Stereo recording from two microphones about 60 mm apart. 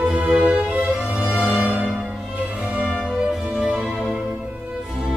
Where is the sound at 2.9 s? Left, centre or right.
Centre.